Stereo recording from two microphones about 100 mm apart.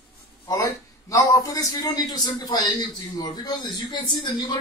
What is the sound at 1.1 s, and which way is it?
A man's voice, 35° left (ahead or behind).